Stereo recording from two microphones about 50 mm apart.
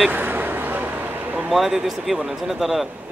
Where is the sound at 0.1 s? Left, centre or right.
Right.